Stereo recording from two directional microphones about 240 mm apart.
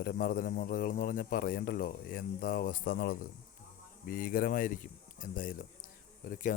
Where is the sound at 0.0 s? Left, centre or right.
Left.